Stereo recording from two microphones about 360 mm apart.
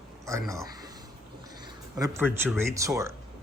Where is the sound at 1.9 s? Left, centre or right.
Centre.